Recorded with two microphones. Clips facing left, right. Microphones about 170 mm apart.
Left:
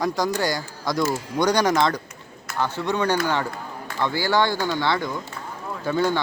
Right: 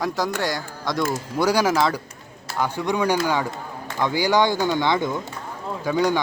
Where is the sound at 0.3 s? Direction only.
Centre (ahead or behind).